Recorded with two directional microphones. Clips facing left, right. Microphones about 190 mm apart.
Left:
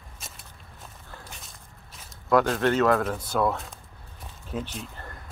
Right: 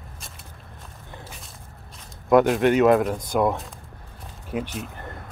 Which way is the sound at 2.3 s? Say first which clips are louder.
Right 5 dB; 20° right (ahead or behind).